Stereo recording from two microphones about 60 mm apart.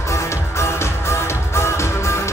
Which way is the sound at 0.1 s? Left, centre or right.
Left.